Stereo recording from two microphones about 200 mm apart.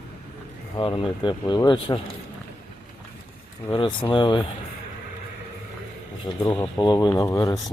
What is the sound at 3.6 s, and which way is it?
Speech, 25° left (ahead or behind).